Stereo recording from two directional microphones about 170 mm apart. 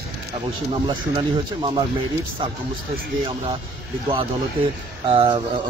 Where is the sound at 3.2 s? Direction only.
35° right (ahead or behind).